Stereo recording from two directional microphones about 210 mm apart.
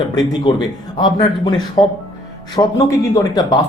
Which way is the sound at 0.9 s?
20° left (ahead or behind).